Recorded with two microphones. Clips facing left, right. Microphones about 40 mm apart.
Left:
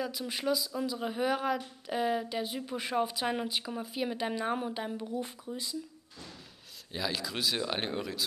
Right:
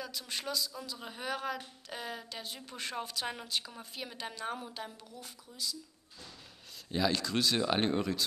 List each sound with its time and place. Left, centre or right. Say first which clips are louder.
0.0 s speech: left 6 dB; centre; by 5.8 s left
6.9 s speech: right 4 dB; centre